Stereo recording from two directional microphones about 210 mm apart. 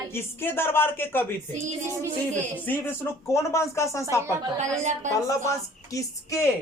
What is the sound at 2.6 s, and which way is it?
A woman's voice, 10° left (ahead or behind).